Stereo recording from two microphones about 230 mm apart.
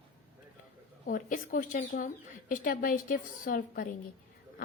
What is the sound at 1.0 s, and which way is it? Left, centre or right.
A woman's voice, left.